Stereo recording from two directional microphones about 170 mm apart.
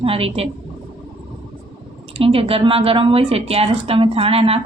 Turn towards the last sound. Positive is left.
turn(degrees=-35)  # may be behind; listen again after turning